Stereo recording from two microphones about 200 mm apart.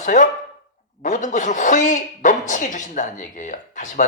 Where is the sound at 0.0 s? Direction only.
40° left (ahead or behind).